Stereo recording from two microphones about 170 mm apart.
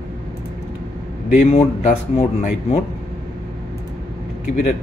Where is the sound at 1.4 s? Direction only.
40° left (ahead or behind).